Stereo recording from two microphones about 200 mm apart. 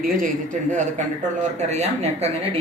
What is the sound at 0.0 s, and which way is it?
A man's voice, 45° right (ahead or behind).